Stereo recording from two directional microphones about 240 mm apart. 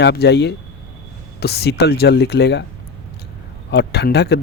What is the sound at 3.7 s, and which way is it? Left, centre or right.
Speech, left.